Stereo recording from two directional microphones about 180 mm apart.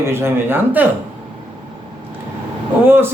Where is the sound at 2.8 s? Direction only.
10° right (ahead or behind).